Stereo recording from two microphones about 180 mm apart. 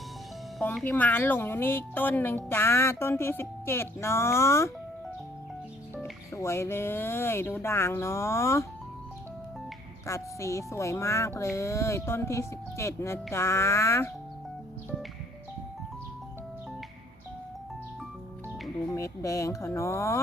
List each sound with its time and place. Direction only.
0.6 s speech: 5° left (ahead or behind)
6.0 s speech: 15° left (ahead or behind)
10.1 s speech: 15° left (ahead or behind)
18.9 s speech: 15° left (ahead or behind)